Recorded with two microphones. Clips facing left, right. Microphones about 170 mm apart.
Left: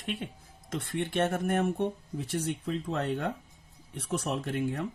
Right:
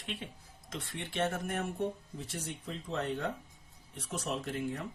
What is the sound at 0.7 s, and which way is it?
Speech, 55° left (ahead or behind).